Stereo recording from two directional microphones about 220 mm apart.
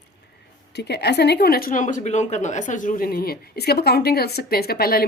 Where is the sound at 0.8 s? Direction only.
50° left (ahead or behind).